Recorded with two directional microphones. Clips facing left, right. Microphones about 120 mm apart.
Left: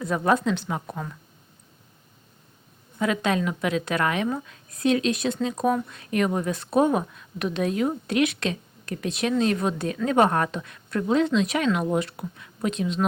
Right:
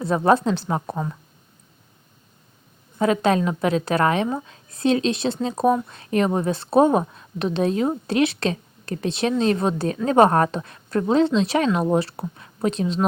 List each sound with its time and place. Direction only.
0.0 s a woman's voice: 30° right (ahead or behind)
3.0 s a woman's voice: 35° right (ahead or behind)